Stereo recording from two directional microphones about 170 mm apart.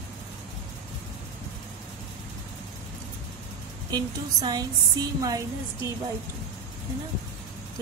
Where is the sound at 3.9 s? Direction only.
25° right (ahead or behind).